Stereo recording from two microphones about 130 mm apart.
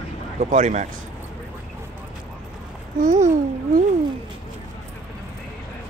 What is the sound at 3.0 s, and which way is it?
Speech, 80° right.